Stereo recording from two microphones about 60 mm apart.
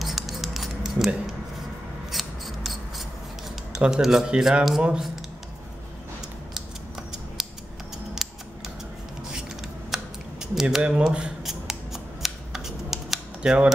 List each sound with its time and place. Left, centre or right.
0.0 s a sound: centre
2.0 s scissors: centre
3.7 s speech: centre
8.1 s scissors: centre
10.4 s speech: centre
11.4 s scissors: centre
13.4 s speech: centre